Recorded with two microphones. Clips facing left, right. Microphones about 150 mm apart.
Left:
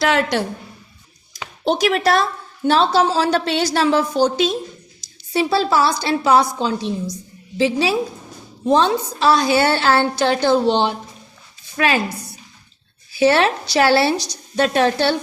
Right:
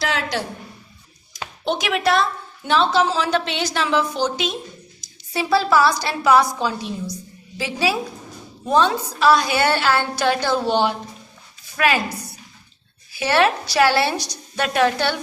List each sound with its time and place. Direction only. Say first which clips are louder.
0.0 s a woman's voice: left 6 dB; 55° left (ahead or behind)
1.6 s a woman's voice: left 4 dB; 35° left (ahead or behind)
13.1 s a woman's voice: left 3 dB; 30° left (ahead or behind)